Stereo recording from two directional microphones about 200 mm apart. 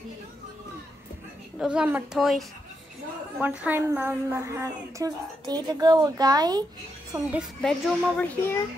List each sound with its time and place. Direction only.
1.6 s a child's voice: 5° right (ahead or behind)
7.3 s a child's voice: centre (ahead or behind)